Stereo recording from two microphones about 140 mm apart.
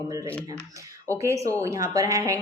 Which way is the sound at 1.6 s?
20° right (ahead or behind).